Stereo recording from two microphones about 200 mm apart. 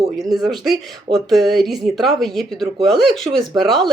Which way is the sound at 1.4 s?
Centre (ahead or behind).